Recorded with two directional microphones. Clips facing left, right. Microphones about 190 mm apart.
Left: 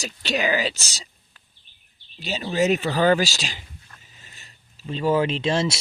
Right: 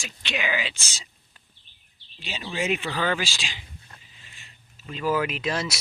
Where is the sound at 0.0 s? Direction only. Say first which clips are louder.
Left 6 dB; 40° left (ahead or behind).